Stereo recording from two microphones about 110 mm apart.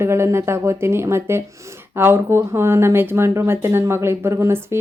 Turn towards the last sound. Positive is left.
turn(degrees=-25)  # may be behind; listen again after turning